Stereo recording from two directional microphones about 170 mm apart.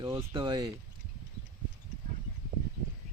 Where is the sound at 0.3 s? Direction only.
25° right (ahead or behind).